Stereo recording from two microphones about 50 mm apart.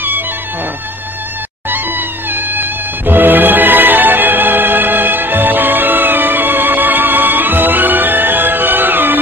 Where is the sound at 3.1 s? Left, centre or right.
Right.